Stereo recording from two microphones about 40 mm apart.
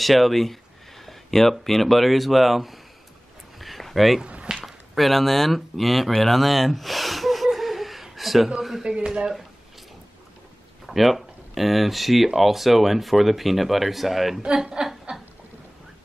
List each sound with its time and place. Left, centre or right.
0.0 s speech: centre
3.5 s a sound: centre
4.6 s speech: centre
6.2 s gasp: centre
8.5 s speech: centre
8.8 s speech: centre
10.9 s speech: centre
14.4 s a woman's voice: centre
15.1 s a sound: centre